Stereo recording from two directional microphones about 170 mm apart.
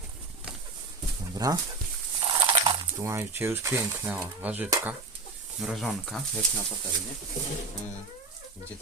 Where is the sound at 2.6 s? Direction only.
15° right (ahead or behind).